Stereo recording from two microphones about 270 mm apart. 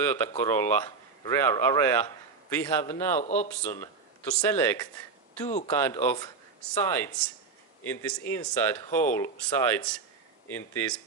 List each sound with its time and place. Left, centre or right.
0.0 s speech: centre
3.2 s speech: left
4.4 s speech: centre
5.5 s speech: left
5.7 s speech: centre